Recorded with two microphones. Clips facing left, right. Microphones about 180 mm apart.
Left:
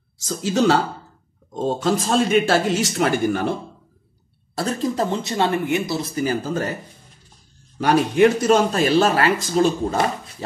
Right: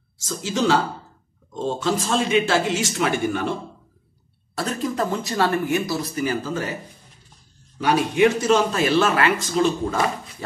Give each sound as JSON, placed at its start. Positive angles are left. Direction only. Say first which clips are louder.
{"t": 0.2, "sound": "speech", "louder": "left 4 dB", "side_deg": 60}
{"t": 1.5, "sound": "a man's voice", "louder": "left 3 dB", "side_deg": 45}
{"t": 4.6, "sound": "speech", "louder": "left 2 dB", "side_deg": 30}
{"t": 7.8, "sound": "speech", "louder": "left 2 dB", "side_deg": 45}